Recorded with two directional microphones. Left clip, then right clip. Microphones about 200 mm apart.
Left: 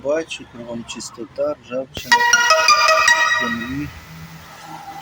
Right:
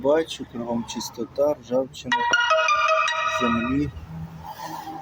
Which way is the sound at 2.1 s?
50° left (ahead or behind).